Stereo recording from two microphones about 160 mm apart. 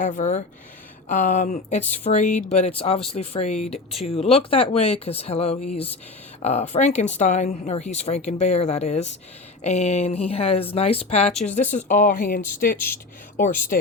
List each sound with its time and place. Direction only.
0.0 s speech: 55° left (ahead or behind)
12.7 s speech: 15° left (ahead or behind)